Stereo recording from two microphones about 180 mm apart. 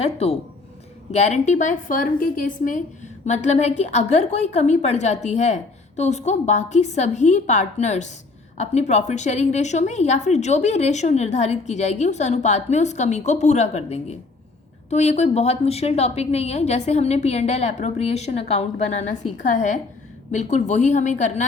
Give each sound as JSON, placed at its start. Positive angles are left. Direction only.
{"t": 0.0, "sound": "a woman's voice", "side_deg": 35}